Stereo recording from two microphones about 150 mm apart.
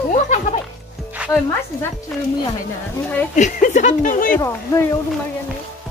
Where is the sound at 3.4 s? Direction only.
55° left (ahead or behind).